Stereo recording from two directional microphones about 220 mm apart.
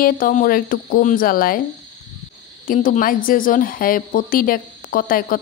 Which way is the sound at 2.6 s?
35° left (ahead or behind).